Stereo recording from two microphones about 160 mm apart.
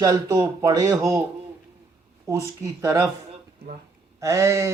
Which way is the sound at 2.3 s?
20° right (ahead or behind).